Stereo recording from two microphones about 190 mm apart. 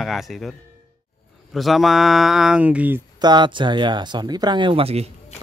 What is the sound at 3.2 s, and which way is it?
Speech, 25° right (ahead or behind).